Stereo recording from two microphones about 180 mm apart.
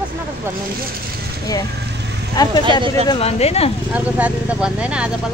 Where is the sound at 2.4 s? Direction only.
20° left (ahead or behind).